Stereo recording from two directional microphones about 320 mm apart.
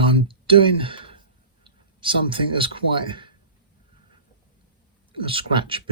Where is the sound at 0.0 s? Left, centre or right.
Centre.